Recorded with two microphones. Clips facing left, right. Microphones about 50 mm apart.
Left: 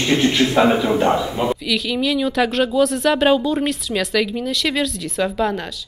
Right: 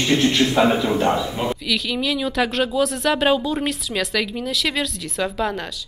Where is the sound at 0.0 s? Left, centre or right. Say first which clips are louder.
Left 1 dB; centre.